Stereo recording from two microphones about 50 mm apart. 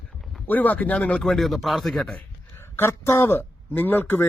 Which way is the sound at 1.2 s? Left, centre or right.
Centre.